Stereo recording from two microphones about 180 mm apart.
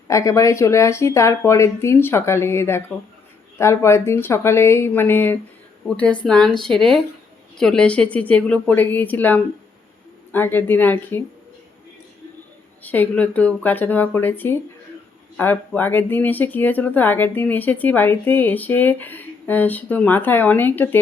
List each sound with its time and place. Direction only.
0.1 s speech: 15° left (ahead or behind)
12.8 s speech: 10° left (ahead or behind)